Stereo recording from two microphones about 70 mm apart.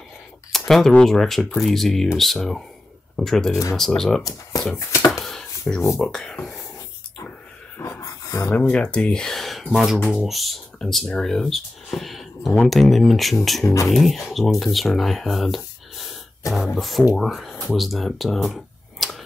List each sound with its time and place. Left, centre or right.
0.5 s speech: centre
4.2 s speech: left
5.9 s speech: centre
7.8 s dog: left
8.6 s speech: centre
18.5 s a sound: centre